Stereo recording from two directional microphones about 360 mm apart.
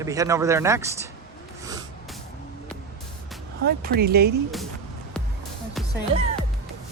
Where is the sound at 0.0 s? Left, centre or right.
Centre.